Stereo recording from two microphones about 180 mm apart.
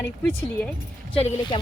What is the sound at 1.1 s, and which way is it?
Speech, 30° left (ahead or behind).